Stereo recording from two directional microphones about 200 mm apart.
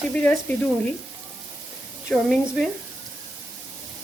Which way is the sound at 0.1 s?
5° left (ahead or behind).